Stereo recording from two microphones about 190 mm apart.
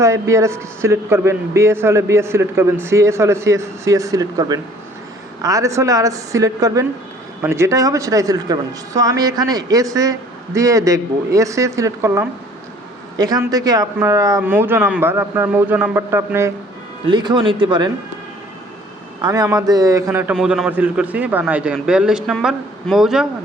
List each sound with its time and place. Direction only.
0.0 s speech: 15° right (ahead or behind)
17.1 s speech: 25° right (ahead or behind)
19.2 s speech: 20° right (ahead or behind)
20.1 s a man's voice: 5° right (ahead or behind)